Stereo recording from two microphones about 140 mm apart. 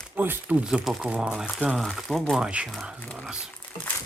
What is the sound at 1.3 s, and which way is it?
Speech, 5° left (ahead or behind).